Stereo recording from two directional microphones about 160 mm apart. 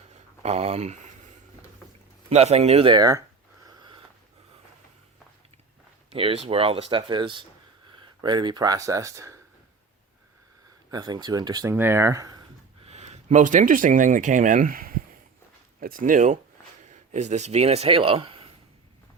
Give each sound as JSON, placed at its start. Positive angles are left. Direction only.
{"t": 0.1, "sound": "a sound", "side_deg": -45}
{"t": 2.3, "sound": "speech", "side_deg": -40}
{"t": 3.7, "sound": "sniff", "side_deg": -30}
{"t": 6.1, "sound": "speech", "side_deg": -40}
{"t": 10.9, "sound": "speech", "side_deg": -25}
{"t": 12.8, "sound": "speech", "side_deg": -40}